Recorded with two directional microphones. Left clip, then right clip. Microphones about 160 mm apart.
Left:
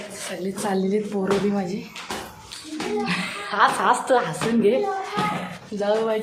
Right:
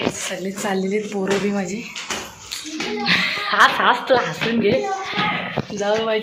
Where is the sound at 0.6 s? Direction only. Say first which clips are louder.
Right 1 dB; 10° left (ahead or behind).